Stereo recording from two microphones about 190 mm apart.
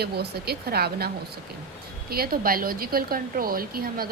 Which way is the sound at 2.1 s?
50° right (ahead or behind).